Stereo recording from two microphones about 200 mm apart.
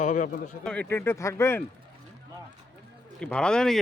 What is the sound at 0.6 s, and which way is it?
Speech, 5° left (ahead or behind).